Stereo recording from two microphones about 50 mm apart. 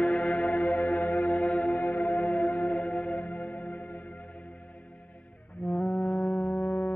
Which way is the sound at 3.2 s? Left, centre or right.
Left.